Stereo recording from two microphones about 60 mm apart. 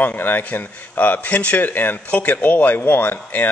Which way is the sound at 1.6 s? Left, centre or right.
Left.